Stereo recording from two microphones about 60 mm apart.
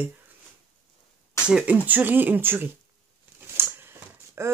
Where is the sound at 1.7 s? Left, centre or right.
Right.